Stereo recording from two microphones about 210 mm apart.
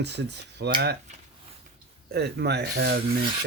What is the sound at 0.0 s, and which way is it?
Filing, 55° right (ahead or behind).